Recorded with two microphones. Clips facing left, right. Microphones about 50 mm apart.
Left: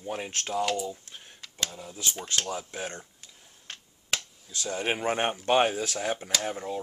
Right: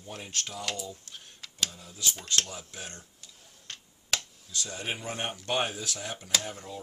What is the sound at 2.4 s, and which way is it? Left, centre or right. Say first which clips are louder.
Tick-tock: left 8 dB; left.